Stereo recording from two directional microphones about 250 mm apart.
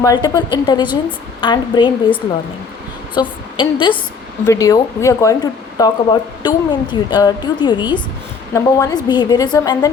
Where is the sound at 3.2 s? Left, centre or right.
Centre.